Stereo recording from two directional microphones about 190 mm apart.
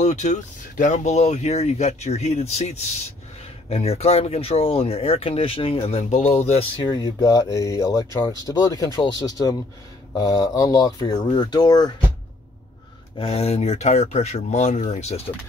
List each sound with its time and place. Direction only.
0.0 s speech: 40° left (ahead or behind); by 11.9 s 20° left (ahead or behind)
13.2 s speech: 30° left (ahead or behind)